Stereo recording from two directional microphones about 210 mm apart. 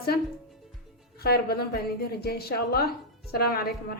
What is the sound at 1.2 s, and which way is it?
A woman's voice, 50° left (ahead or behind).